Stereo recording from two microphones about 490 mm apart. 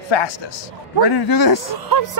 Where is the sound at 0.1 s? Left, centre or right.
Left.